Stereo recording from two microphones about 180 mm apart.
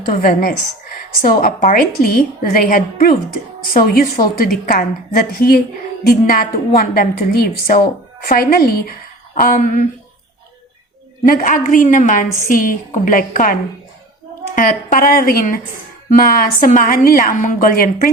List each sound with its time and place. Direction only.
0.1 s a woman's voice: 55° left (ahead or behind)
11.3 s a woman's voice: 50° left (ahead or behind)